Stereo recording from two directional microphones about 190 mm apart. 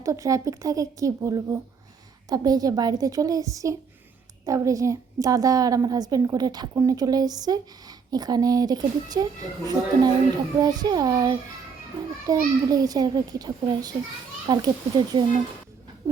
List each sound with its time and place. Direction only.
0.0 s a woman's voice: 15° right (ahead or behind)